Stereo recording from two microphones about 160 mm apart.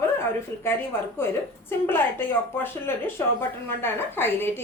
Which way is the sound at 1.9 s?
15° left (ahead or behind).